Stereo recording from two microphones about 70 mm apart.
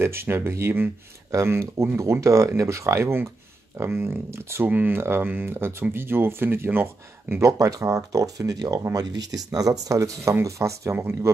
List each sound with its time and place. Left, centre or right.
0.0 s speech: right
4.6 s speech: right